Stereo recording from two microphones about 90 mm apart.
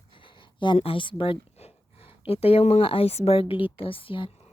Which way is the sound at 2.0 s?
90° left.